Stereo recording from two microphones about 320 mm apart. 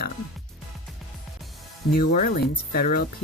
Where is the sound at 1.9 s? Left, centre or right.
Left.